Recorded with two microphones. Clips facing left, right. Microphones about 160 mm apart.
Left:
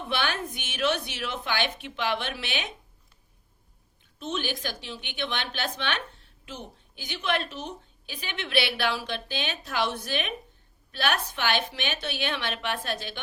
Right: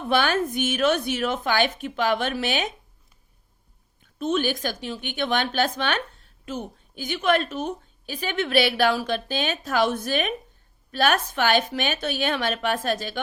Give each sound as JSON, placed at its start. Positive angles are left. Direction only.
{"t": 0.1, "sound": "a woman's voice", "side_deg": -45}
{"t": 4.2, "sound": "a woman's voice", "side_deg": -50}